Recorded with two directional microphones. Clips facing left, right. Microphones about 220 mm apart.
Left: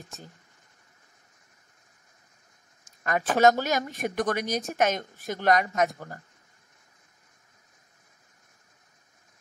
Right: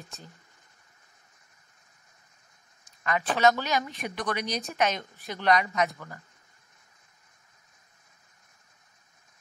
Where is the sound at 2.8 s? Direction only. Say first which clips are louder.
Left 1 dB; 45° left (ahead or behind).